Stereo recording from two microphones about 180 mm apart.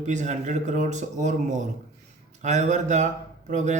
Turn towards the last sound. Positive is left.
turn(degrees=-40)  # may be behind; listen again after turning